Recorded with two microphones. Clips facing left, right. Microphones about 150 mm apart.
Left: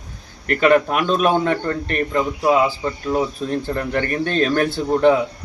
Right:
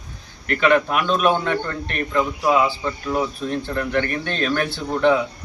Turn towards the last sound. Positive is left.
turn(degrees=45)  # may be behind; listen again after turning